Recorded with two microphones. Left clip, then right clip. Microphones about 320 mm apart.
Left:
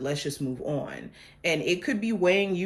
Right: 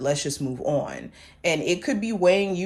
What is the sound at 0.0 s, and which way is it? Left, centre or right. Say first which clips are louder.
Speech: right 5 dB; centre.